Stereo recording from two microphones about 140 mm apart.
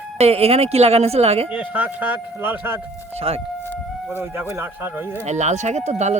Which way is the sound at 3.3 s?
45° right (ahead or behind).